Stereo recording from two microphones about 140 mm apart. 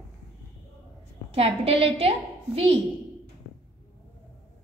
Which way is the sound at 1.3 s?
45° right (ahead or behind).